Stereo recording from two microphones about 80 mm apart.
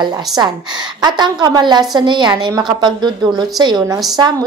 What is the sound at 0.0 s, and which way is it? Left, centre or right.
Speech, right.